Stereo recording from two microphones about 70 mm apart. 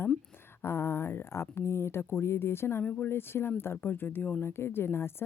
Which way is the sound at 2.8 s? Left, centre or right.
Centre.